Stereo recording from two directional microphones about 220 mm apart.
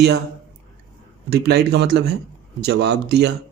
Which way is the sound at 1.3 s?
50° right (ahead or behind).